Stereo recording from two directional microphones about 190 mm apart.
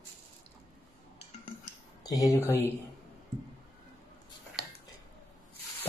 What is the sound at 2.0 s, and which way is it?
Speech, 20° left (ahead or behind).